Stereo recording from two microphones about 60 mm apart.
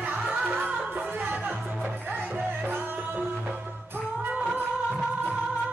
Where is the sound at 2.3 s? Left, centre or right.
Right.